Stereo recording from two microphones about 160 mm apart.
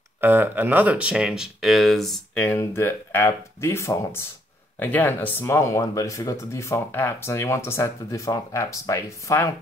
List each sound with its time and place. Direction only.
0.2 s speech: 15° right (ahead or behind); by 9.5 s 20° left (ahead or behind)